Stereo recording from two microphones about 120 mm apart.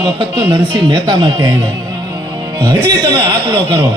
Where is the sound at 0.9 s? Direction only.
40° right (ahead or behind).